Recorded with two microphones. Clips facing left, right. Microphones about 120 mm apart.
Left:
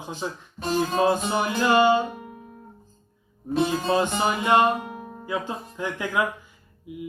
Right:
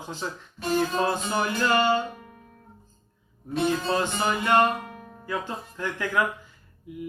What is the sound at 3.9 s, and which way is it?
Speech, 15° left (ahead or behind).